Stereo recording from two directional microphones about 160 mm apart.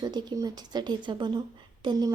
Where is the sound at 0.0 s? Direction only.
25° right (ahead or behind).